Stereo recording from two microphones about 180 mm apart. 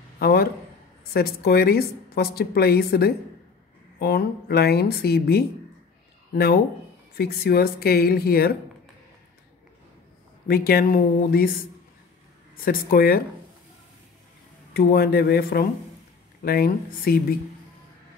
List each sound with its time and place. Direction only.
0.2 s a man's voice: 60° left (ahead or behind)
10.5 s speech: 55° left (ahead or behind)
12.6 s speech: 55° left (ahead or behind)
14.7 s speech: 60° left (ahead or behind)